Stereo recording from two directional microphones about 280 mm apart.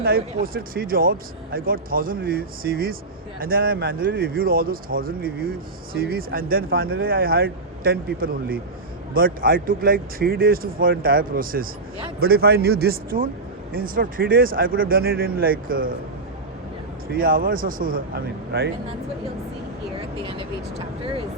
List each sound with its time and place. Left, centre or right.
0.0 s speech: right
17.1 s speech: right
20.0 s speech: centre